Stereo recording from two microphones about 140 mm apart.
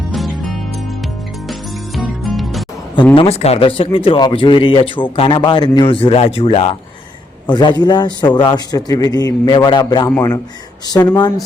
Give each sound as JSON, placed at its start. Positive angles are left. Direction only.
{"t": 0.1, "sound": "music", "side_deg": 0}
{"t": 2.0, "sound": "music", "side_deg": 0}
{"t": 3.2, "sound": "speech", "side_deg": 45}
{"t": 7.4, "sound": "speech", "side_deg": 35}